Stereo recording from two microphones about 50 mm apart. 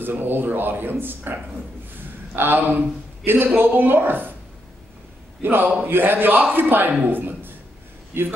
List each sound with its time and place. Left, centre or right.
0.0 s speech: right
5.4 s a man's voice: right